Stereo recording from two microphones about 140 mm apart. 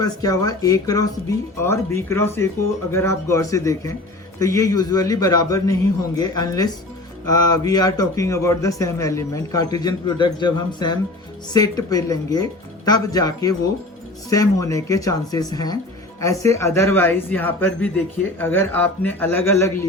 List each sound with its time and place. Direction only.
0.0 s a man's voice: 25° left (ahead or behind)